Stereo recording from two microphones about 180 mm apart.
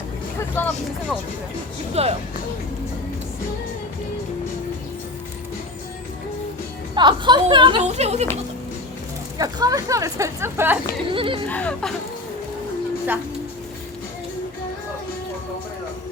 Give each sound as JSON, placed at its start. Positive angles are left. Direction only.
{"t": 0.3, "sound": "vehicle", "side_deg": 10}
{"t": 1.9, "sound": "speech", "side_deg": -35}
{"t": 6.9, "sound": "a woman's voice", "side_deg": -25}
{"t": 9.4, "sound": "a woman's voice", "side_deg": -20}
{"t": 11.1, "sound": "a woman's voice", "side_deg": -30}
{"t": 11.4, "sound": "speech", "side_deg": 5}